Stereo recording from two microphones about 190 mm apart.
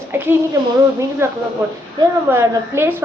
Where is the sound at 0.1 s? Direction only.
10° right (ahead or behind).